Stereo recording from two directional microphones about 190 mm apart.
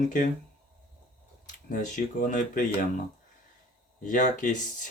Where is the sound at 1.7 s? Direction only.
40° left (ahead or behind).